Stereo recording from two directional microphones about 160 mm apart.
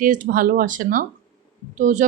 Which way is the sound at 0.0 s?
55° right (ahead or behind).